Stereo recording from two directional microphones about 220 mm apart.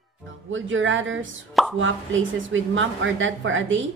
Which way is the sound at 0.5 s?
60° right (ahead or behind).